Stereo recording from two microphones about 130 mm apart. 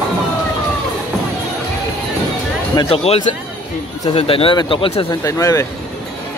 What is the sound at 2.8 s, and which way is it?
Speech, 50° left (ahead or behind).